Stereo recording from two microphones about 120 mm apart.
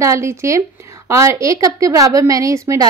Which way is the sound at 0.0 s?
25° right (ahead or behind).